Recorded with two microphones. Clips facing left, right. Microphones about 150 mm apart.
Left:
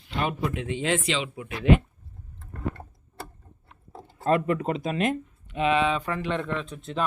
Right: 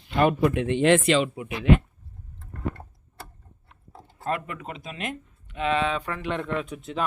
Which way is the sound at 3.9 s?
30° left (ahead or behind).